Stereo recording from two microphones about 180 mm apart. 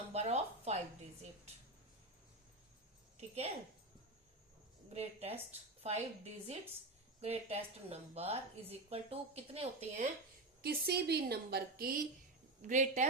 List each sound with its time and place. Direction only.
0.1 s speech: 35° right (ahead or behind)
3.2 s speech: 35° right (ahead or behind)
4.9 s a woman's voice: 35° right (ahead or behind)
10.6 s a woman's voice: 65° right (ahead or behind)
12.6 s a woman's voice: 40° right (ahead or behind)